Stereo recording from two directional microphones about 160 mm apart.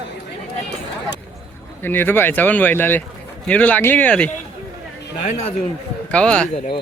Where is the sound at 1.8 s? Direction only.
15° left (ahead or behind).